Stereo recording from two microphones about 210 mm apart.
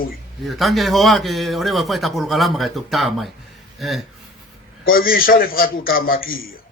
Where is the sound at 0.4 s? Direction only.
Centre (ahead or behind).